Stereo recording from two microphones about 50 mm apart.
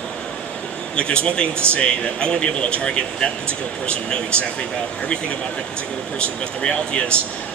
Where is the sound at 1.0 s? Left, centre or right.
Centre.